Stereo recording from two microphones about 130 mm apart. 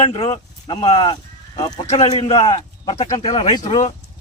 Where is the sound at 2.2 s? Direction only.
50° left (ahead or behind).